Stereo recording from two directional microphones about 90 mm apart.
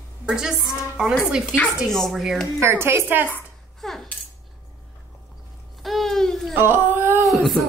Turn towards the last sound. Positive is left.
turn(degrees=0)  # may be behind; listen again after turning